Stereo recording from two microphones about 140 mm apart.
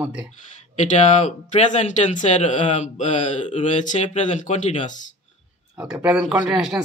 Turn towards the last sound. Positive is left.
turn(degrees=-5)  # may be behind; listen again after turning